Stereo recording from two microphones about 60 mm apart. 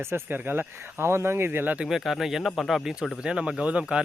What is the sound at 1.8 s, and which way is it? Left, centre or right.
Speech, centre.